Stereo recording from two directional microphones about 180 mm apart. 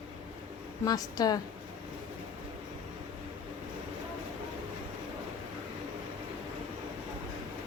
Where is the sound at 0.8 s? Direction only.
20° left (ahead or behind).